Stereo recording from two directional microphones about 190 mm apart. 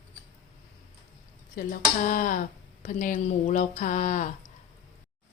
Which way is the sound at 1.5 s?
45° left (ahead or behind).